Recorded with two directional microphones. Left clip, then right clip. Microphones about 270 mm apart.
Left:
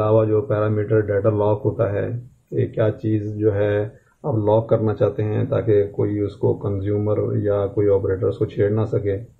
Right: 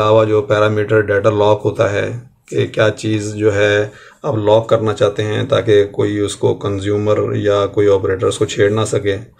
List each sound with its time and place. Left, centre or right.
0.0 s speech: centre